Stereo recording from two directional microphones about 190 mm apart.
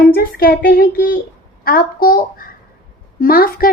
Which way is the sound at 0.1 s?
55° left (ahead or behind).